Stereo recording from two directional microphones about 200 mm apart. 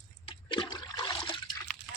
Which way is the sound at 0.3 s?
25° left (ahead or behind).